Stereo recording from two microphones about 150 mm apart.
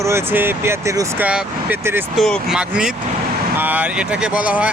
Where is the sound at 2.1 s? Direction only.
Centre (ahead or behind).